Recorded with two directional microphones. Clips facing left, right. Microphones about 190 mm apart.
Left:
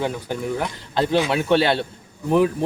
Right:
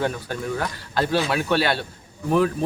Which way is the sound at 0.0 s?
15° left (ahead or behind).